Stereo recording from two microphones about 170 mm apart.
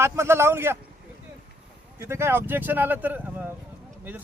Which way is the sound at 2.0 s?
15° right (ahead or behind).